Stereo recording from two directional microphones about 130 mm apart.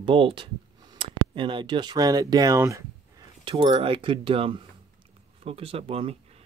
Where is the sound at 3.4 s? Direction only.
40° right (ahead or behind).